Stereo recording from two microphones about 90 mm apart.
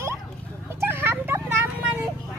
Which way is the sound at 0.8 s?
25° right (ahead or behind).